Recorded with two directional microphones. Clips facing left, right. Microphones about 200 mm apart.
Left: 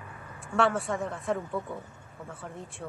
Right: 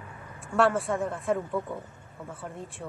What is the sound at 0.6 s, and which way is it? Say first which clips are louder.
Speech: right 2 dB; centre (ahead or behind).